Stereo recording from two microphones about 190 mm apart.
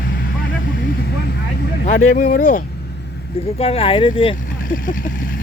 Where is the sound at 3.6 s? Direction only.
30° left (ahead or behind).